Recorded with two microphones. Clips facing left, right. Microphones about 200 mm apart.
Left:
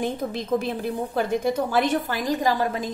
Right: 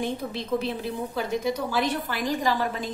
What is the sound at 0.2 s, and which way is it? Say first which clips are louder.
A woman's voice: left 3 dB; 45° left (ahead or behind).